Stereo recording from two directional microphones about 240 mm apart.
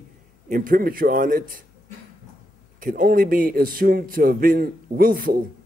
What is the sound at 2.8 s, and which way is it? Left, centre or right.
A man's voice, right.